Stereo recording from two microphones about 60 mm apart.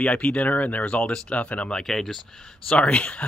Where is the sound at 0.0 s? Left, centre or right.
Left.